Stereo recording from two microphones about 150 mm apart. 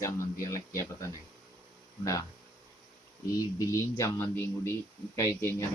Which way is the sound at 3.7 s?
20° left (ahead or behind).